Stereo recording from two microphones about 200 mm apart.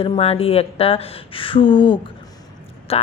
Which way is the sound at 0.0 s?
30° left (ahead or behind).